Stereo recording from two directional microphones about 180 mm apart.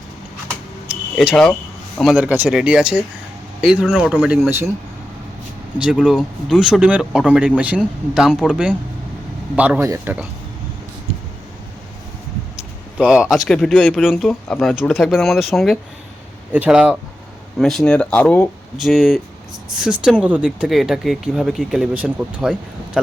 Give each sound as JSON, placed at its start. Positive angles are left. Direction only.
{"t": 1.1, "sound": "speech", "side_deg": 0}
{"t": 5.8, "sound": "speech", "side_deg": -5}
{"t": 12.5, "sound": "speech", "side_deg": -5}